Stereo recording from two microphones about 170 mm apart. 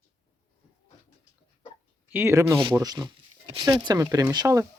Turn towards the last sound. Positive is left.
turn(degrees=-20)  # may be behind; listen again after turning